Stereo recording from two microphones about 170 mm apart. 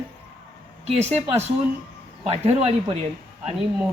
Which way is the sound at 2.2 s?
35° right (ahead or behind).